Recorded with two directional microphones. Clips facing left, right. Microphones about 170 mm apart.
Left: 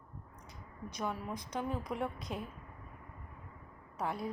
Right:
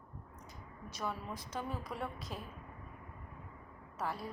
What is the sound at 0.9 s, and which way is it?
A woman's voice, 15° left (ahead or behind).